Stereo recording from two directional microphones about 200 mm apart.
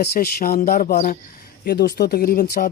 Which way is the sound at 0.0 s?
50° left (ahead or behind).